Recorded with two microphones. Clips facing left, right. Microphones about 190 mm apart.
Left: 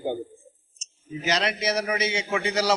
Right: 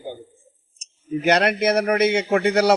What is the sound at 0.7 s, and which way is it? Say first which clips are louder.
A man's voice: right 10 dB; 60° right (ahead or behind).